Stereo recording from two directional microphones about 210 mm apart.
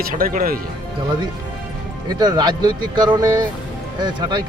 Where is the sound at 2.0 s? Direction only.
20° right (ahead or behind).